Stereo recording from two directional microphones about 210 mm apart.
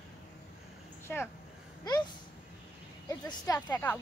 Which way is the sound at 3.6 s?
10° left (ahead or behind).